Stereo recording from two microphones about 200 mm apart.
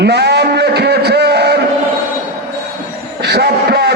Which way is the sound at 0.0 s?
55° right (ahead or behind).